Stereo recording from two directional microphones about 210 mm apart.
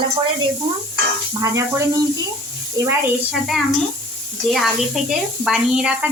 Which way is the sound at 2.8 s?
15° right (ahead or behind).